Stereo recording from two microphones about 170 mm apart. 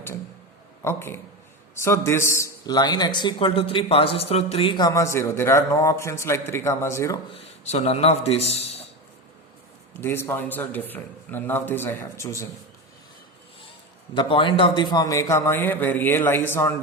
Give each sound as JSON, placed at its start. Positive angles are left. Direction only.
{"t": 0.9, "sound": "a man's voice", "side_deg": 15}
{"t": 7.3, "sound": "a man's voice", "side_deg": 35}
{"t": 9.9, "sound": "a man's voice", "side_deg": 15}
{"t": 14.1, "sound": "a man's voice", "side_deg": 30}